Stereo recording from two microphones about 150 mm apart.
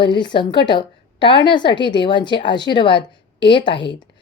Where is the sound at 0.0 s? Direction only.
30° left (ahead or behind).